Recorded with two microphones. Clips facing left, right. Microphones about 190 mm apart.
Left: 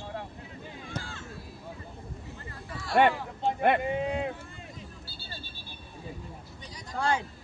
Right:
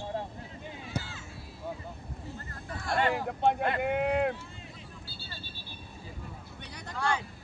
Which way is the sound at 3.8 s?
65° right (ahead or behind).